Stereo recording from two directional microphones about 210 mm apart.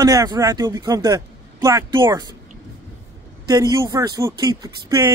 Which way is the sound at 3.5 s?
15° right (ahead or behind).